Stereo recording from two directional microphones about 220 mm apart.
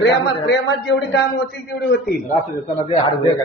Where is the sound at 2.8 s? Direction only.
25° left (ahead or behind).